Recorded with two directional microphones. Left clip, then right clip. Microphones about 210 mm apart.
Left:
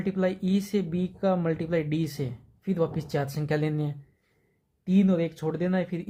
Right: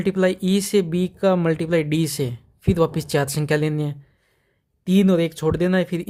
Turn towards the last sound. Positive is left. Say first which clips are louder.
# right 8 dB
turn(degrees=-40)  # may be behind; listen again after turning